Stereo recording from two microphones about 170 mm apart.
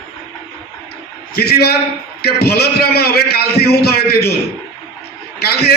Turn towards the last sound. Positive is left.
turn(degrees=65)  # may be behind; listen again after turning